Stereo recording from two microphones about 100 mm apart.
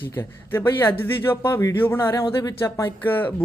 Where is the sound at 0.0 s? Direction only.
20° left (ahead or behind).